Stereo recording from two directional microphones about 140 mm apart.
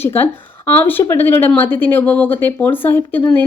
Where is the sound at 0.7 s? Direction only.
15° left (ahead or behind).